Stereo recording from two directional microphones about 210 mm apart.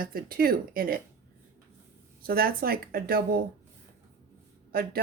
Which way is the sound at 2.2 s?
45° right (ahead or behind).